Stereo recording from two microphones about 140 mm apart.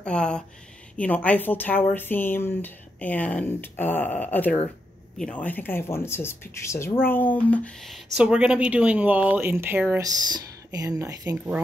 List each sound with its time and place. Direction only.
0.0 s speech: 5° left (ahead or behind); by 10.0 s 15° right (ahead or behind)
10.3 s speech: 25° right (ahead or behind)